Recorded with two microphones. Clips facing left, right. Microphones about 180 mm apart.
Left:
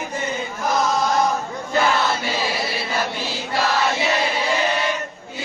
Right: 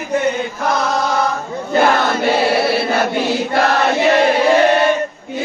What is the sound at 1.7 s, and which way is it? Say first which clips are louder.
Chant: right 6 dB; 60° right (ahead or behind).